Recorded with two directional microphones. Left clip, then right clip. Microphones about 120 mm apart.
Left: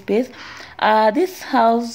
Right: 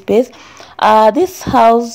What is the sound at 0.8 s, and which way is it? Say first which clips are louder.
Speech: right 6 dB; 40° right (ahead or behind).